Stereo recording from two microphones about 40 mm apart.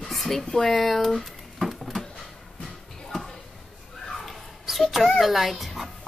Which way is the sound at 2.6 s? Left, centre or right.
Centre.